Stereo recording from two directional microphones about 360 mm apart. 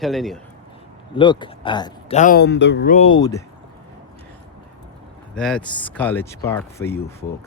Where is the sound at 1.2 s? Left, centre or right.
Centre.